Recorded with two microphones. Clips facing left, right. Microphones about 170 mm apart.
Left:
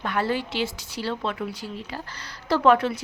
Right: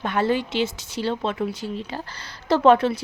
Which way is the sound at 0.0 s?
20° right (ahead or behind).